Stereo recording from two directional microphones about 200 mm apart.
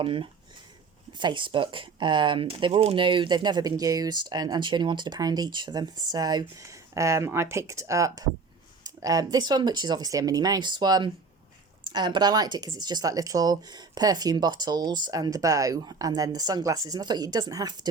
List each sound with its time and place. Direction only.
0.0 s speech: 25° right (ahead or behind)